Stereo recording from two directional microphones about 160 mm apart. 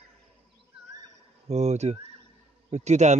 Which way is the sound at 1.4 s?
45° right (ahead or behind).